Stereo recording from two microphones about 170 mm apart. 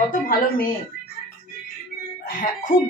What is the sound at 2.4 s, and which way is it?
Speech, 50° left (ahead or behind).